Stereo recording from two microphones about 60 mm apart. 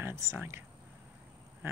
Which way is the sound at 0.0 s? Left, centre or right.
Right.